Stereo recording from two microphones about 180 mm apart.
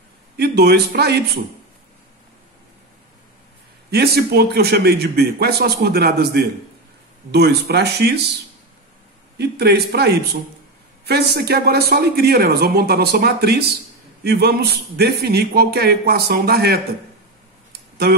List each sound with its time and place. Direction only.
0.4 s a man's voice: 65° right (ahead or behind)
3.9 s a man's voice: 60° right (ahead or behind)
9.4 s a man's voice: 65° right (ahead or behind)